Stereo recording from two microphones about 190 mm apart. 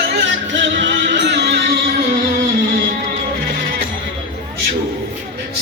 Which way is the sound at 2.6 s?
50° right (ahead or behind).